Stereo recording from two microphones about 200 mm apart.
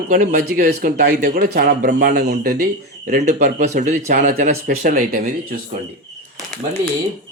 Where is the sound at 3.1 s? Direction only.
40° right (ahead or behind).